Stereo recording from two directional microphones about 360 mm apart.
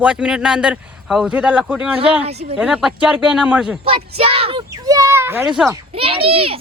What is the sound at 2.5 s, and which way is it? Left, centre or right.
Speech, centre.